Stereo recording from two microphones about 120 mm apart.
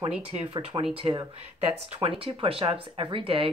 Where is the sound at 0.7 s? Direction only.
35° right (ahead or behind).